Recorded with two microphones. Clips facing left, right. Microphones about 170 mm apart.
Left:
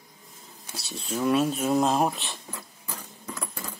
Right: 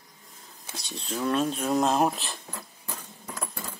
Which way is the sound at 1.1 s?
10° left (ahead or behind).